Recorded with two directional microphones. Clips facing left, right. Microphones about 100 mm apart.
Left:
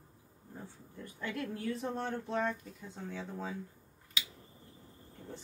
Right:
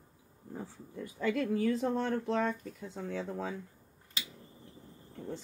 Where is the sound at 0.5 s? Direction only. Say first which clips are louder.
Right 6 dB; 90° right.